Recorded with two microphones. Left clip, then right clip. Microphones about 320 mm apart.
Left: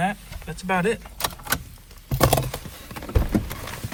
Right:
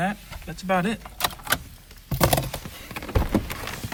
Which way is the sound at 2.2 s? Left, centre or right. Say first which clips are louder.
Left 2 dB; left.